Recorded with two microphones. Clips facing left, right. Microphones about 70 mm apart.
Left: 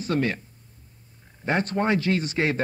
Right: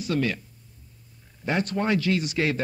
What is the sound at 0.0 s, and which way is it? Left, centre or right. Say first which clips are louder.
Speech: left 1 dB; left.